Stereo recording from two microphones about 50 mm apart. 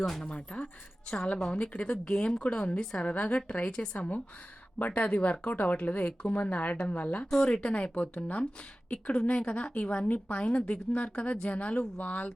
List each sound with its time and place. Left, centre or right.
0.0 s speech: centre
0.3 s a sound: left
1.4 s a woman's voice: left
7.3 s a woman's voice: centre; by 12.3 s left